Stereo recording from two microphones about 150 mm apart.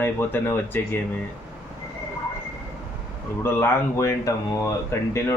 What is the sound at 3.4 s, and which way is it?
Speech, 15° left (ahead or behind).